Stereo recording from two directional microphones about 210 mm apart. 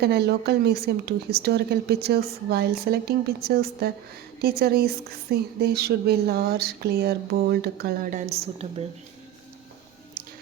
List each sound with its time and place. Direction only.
0.0 s speech: 50° right (ahead or behind); by 8.6 s 30° right (ahead or behind)